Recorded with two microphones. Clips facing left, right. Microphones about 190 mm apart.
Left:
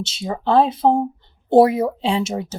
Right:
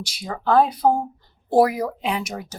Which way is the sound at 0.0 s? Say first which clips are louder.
Left 3 dB; 25° left (ahead or behind).